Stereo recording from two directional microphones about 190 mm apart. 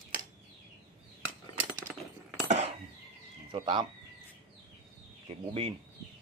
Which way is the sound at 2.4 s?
35° right (ahead or behind).